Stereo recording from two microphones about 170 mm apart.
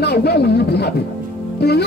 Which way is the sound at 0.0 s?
70° left (ahead or behind).